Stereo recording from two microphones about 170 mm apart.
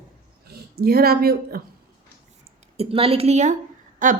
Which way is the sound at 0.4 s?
65° right (ahead or behind).